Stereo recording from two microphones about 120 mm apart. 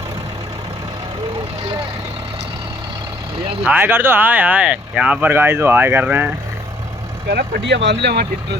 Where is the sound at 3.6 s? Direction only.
15° right (ahead or behind).